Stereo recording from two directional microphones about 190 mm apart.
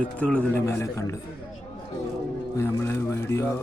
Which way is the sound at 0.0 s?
5° left (ahead or behind).